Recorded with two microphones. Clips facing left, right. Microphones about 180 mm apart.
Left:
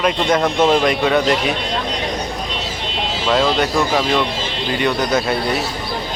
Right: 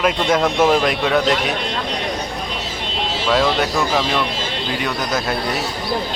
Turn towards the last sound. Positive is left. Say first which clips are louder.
# left 4 dB
turn(degrees=0)  # may be behind; listen again after turning